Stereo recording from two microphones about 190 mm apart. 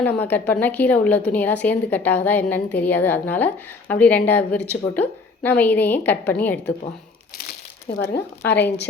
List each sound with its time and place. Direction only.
0.0 s a woman's voice: 10° left (ahead or behind)
7.9 s speech: 60° left (ahead or behind)